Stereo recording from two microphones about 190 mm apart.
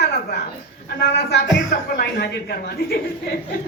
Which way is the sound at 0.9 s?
60° left (ahead or behind).